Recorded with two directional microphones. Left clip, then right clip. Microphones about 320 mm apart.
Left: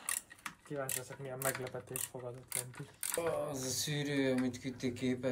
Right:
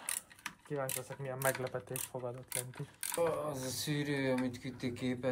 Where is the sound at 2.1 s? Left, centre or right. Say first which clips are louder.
Right 6 dB; right.